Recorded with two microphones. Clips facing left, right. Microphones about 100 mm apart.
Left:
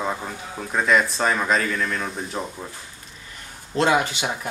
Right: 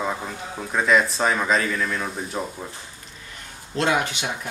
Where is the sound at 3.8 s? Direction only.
30° left (ahead or behind).